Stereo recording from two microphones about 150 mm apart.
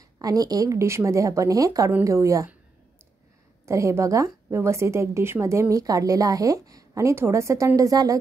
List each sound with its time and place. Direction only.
0.2 s a woman's voice: 25° right (ahead or behind)
3.6 s a woman's voice: 20° right (ahead or behind)